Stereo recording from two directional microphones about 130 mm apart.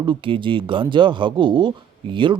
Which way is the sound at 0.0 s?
40° right (ahead or behind).